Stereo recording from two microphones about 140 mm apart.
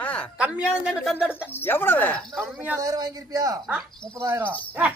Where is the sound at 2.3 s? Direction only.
Centre (ahead or behind).